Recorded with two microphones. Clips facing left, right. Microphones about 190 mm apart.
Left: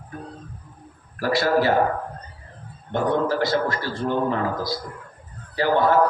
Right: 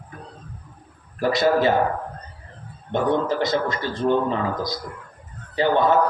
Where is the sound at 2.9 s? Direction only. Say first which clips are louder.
Even; 20° right (ahead or behind).